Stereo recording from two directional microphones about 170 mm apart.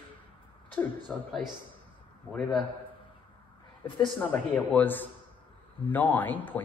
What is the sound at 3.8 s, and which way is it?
Speech, 30° left (ahead or behind).